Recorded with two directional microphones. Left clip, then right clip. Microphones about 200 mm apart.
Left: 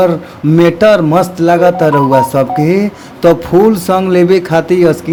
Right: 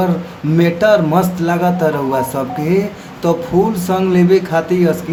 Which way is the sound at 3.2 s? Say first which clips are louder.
Left 7 dB; 35° left (ahead or behind).